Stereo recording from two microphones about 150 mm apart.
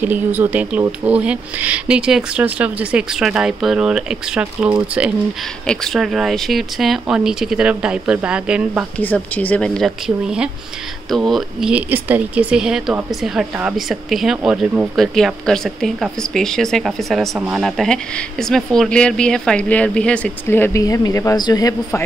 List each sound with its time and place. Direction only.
0.0 s speech: 10° right (ahead or behind)
5.7 s speech: 5° left (ahead or behind)
8.9 s speech: 10° left (ahead or behind); by 21.7 s 25° left (ahead or behind)